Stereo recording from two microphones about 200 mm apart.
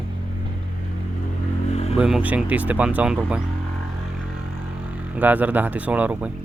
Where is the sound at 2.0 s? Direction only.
5° right (ahead or behind).